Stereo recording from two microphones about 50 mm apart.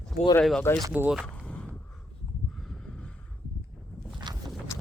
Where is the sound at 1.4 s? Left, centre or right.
Left.